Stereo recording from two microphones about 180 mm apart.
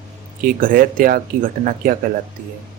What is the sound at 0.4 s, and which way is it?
Speech, 50° right (ahead or behind).